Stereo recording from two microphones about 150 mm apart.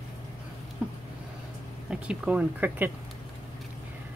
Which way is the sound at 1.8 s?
5° right (ahead or behind).